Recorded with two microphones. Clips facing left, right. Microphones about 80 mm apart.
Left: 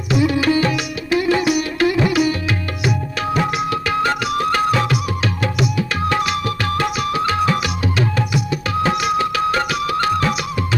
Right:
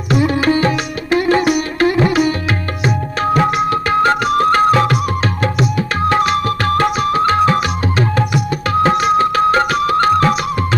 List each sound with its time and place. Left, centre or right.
0.1 s music: right
5.4 s tabla: right